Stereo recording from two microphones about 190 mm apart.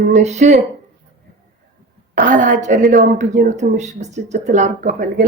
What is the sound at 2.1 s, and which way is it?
A woman's voice, 45° right (ahead or behind).